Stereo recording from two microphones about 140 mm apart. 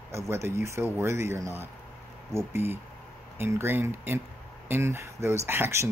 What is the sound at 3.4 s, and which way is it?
Speech, 20° right (ahead or behind).